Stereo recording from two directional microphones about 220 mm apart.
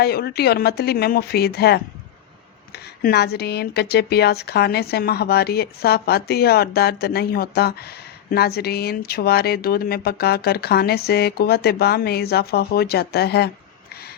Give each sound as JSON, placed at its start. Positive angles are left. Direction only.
{"t": 0.0, "sound": "speech", "side_deg": 45}